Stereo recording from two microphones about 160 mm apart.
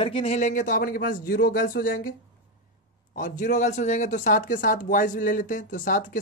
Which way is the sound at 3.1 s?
55° left (ahead or behind).